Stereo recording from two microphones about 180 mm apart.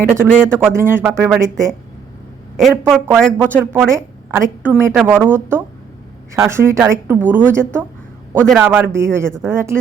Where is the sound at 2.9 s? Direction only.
Centre (ahead or behind).